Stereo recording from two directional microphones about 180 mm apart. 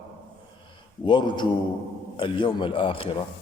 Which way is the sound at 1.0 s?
25° left (ahead or behind).